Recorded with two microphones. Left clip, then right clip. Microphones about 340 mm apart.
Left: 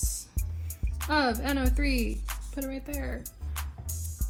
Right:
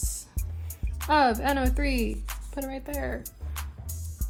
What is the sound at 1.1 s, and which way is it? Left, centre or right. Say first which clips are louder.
Speech: right 5 dB; right.